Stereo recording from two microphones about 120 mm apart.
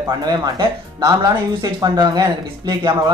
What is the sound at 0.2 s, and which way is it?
Speech, 35° right (ahead or behind).